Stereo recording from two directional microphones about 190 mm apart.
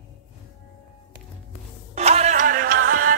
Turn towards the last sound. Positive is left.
turn(degrees=-50)  # may be behind; listen again after turning